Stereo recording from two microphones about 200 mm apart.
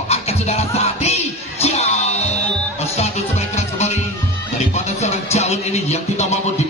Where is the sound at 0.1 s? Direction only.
30° left (ahead or behind).